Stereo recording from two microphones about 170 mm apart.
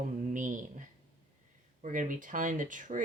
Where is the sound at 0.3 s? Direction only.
50° right (ahead or behind).